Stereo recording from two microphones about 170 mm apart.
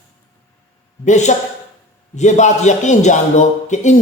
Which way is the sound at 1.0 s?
45° left (ahead or behind).